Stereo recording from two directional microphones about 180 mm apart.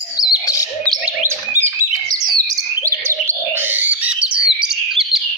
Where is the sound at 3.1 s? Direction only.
15° right (ahead or behind).